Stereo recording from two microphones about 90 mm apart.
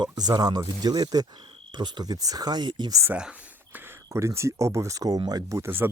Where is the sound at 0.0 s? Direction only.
50° right (ahead or behind).